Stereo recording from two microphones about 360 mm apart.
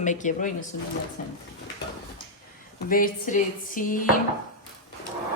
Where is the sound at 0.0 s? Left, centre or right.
Left.